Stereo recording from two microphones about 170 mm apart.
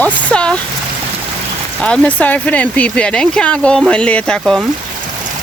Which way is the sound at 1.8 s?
5° left (ahead or behind).